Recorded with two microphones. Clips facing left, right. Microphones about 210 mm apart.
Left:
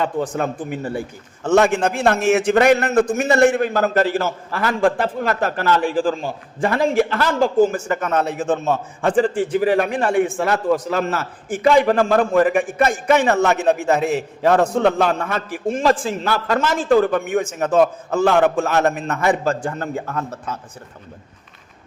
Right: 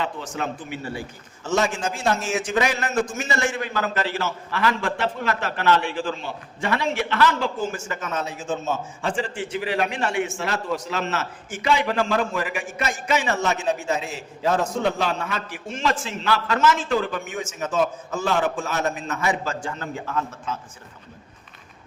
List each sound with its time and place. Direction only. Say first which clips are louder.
0.0 s a man's voice: left 7 dB; 50° left (ahead or behind)
9.3 s a man's voice: left 9 dB; 40° left (ahead or behind)